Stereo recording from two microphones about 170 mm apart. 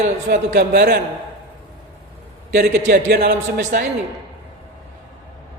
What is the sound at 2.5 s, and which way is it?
A man's voice, 70° right (ahead or behind).